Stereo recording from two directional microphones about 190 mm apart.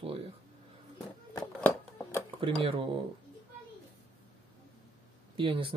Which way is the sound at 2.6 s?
30° right (ahead or behind).